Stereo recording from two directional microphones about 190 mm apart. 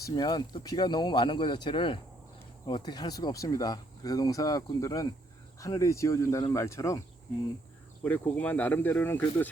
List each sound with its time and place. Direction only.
0.0 s speech: 20° left (ahead or behind)
8.0 s speech: 10° left (ahead or behind)